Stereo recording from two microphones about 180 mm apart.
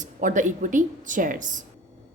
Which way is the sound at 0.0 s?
45° right (ahead or behind).